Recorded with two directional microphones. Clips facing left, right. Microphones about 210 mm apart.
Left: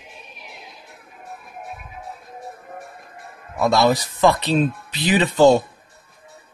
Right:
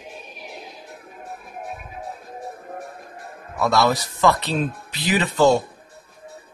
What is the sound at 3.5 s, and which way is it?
Speech, 15° left (ahead or behind).